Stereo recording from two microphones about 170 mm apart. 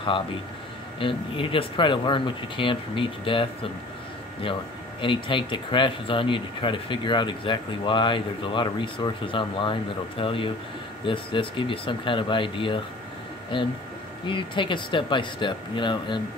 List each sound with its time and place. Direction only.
0.9 s speech: 30° left (ahead or behind)
5.0 s speech: 30° left (ahead or behind)